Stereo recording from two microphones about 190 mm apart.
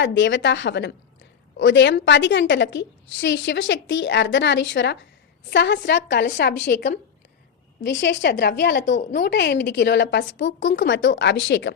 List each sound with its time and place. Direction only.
0.0 s a woman's voice: 70° left (ahead or behind)